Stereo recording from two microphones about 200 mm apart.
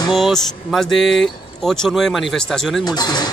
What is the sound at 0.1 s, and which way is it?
Speech, centre (ahead or behind).